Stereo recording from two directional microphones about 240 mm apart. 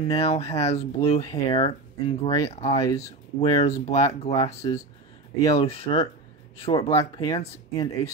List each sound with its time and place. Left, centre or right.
0.0 s speech: left